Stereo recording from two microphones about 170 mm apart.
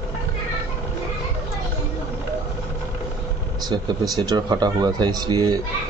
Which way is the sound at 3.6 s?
25° right (ahead or behind).